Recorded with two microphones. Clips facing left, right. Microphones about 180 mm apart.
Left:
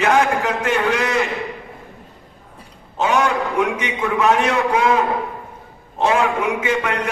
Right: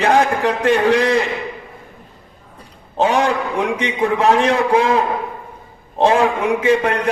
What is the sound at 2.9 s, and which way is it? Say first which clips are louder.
A man's voice: right 2 dB; 35° right (ahead or behind).